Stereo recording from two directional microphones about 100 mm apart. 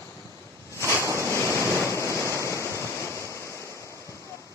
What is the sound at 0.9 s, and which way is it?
Waves, 25° left (ahead or behind).